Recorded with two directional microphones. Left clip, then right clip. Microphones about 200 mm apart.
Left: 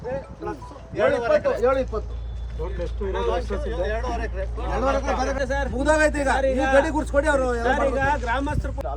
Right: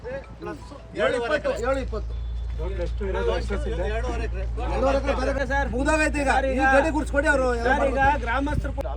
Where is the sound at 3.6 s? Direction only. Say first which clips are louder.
Left 2 dB; 10° left (ahead or behind).